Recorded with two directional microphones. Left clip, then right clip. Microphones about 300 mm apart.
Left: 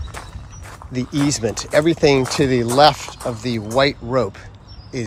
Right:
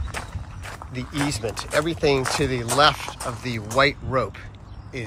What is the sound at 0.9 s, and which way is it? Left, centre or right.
Speech, left.